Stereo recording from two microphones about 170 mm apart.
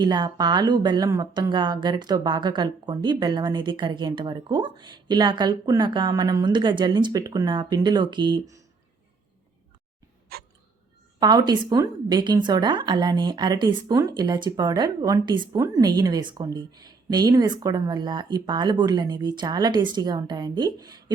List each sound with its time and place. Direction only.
0.0 s speech: 25° right (ahead or behind)
10.3 s hiccup: 60° right (ahead or behind)
11.2 s speech: 25° right (ahead or behind)